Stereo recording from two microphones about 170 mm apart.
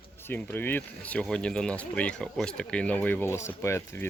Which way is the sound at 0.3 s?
10° left (ahead or behind).